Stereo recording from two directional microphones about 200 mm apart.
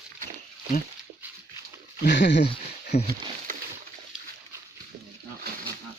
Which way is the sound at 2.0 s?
60° left (ahead or behind).